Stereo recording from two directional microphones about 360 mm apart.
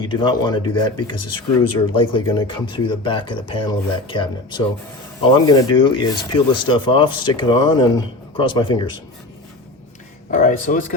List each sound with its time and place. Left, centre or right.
0.0 s speech: centre
10.3 s speech: left